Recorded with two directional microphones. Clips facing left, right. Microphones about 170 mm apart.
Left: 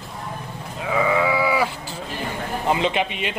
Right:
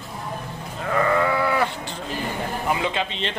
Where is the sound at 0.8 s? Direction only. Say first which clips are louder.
Even; 5° left (ahead or behind).